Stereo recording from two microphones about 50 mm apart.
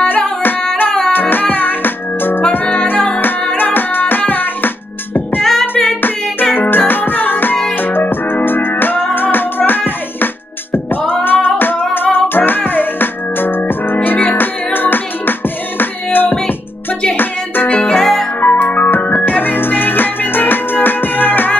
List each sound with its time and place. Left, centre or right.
1.1 s music: left
2.5 s music: left
5.4 s music: centre
5.9 s music: left
11.2 s singing: left
11.9 s music: left
17.8 s music: centre
18.4 s music: left
18.9 s music: left